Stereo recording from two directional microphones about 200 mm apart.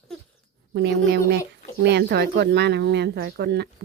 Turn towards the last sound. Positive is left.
turn(degrees=-55)  # may be behind; listen again after turning